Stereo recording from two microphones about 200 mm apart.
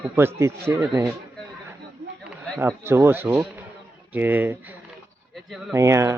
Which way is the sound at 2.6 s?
10° right (ahead or behind).